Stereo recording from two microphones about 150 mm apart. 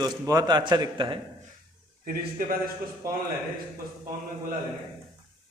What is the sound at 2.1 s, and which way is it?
Speech, 75° right (ahead or behind).